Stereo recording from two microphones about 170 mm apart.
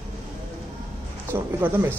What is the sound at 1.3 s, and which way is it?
Speech, 15° right (ahead or behind).